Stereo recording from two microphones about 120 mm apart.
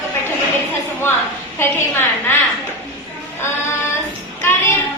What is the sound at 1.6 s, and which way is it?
Speech, 20° left (ahead or behind).